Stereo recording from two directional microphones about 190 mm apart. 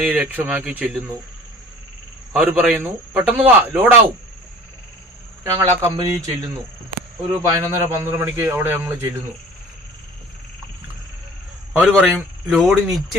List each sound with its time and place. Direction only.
0.0 s speech: 10° right (ahead or behind)
2.3 s speech: 5° right (ahead or behind)
5.4 s speech: 15° right (ahead or behind)
11.8 s speech: centre (ahead or behind)